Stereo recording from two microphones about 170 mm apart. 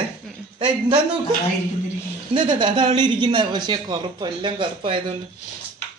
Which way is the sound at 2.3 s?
25° right (ahead or behind).